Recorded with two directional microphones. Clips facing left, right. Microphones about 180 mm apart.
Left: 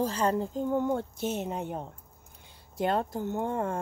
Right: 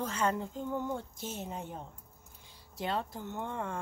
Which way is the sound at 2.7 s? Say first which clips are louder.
Left 7 dB; 50° left (ahead or behind).